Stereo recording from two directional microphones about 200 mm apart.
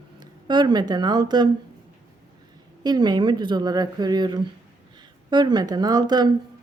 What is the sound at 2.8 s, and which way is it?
A man's voice, 20° right (ahead or behind).